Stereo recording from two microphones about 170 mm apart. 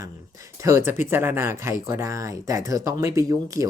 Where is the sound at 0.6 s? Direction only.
15° right (ahead or behind).